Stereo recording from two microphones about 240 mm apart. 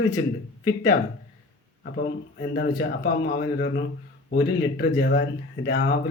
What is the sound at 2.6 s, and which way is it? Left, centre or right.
A man's voice, left.